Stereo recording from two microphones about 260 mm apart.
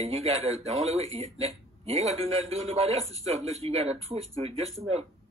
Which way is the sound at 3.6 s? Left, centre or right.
Right.